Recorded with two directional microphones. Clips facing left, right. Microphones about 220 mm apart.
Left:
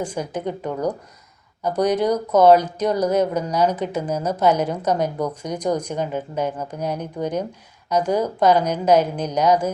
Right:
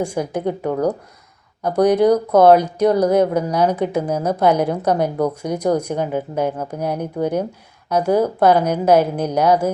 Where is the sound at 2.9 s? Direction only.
10° right (ahead or behind).